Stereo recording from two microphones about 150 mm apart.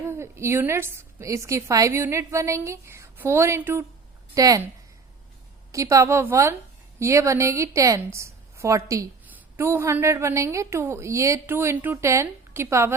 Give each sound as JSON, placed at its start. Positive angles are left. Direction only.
{"t": 0.1, "sound": "a woman's voice", "side_deg": -20}
{"t": 5.7, "sound": "a woman's voice", "side_deg": -20}